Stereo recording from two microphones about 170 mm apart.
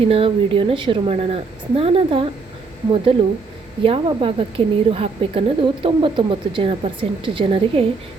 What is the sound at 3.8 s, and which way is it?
A woman's voice, 30° right (ahead or behind).